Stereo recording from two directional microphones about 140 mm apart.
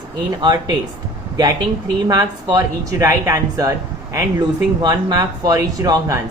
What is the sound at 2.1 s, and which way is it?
Speech, 25° right (ahead or behind).